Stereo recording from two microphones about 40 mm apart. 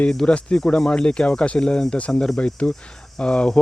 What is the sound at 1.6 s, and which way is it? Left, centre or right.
Speech, centre.